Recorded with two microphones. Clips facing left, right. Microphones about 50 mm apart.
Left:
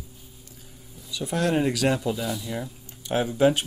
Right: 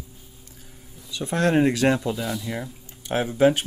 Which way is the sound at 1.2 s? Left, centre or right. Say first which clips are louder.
Right 4 dB; right.